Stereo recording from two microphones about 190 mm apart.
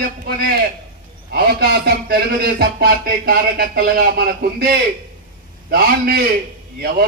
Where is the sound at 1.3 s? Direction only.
55° right (ahead or behind).